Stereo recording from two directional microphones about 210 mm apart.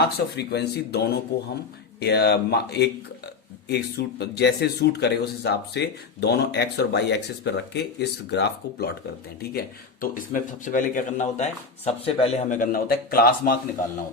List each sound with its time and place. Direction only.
0.0 s a man's voice: 50° left (ahead or behind)